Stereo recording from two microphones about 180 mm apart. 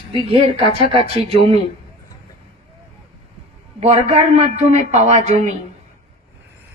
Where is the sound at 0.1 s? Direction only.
30° right (ahead or behind).